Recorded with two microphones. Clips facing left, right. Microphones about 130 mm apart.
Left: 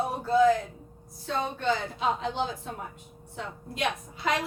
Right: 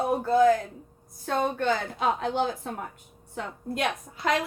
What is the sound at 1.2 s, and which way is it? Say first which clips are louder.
A woman's voice: right 3 dB; 50° right (ahead or behind).